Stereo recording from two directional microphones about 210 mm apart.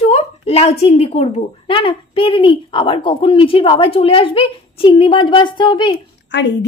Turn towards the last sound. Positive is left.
turn(degrees=55)  # may be behind; listen again after turning